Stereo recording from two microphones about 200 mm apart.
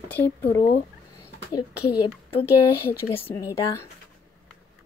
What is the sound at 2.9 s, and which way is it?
A woman's voice, 10° left (ahead or behind).